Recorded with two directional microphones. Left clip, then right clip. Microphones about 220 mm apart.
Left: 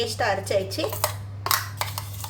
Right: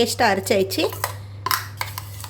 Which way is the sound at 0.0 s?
50° right (ahead or behind).